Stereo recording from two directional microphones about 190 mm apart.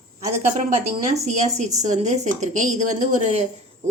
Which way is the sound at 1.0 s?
35° right (ahead or behind).